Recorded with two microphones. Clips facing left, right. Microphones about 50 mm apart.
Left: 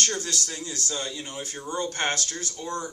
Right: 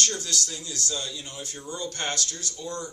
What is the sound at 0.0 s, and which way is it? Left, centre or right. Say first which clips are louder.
Speech: left 1 dB; left.